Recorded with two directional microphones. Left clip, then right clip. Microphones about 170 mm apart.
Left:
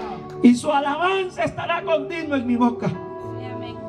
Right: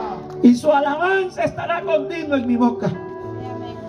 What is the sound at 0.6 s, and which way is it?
A man's voice, 20° left (ahead or behind).